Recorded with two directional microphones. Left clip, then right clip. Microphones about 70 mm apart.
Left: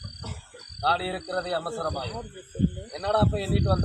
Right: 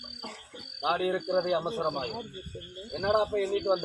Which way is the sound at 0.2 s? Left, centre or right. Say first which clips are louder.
Right 1 dB; left.